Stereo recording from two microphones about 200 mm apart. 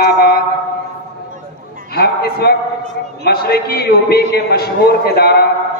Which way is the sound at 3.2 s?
50° left (ahead or behind).